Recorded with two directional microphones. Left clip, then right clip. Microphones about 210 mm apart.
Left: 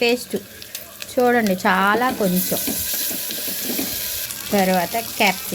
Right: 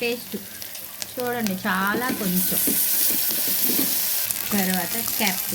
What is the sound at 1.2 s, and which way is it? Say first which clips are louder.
Speech: left 10 dB; 35° left (ahead or behind).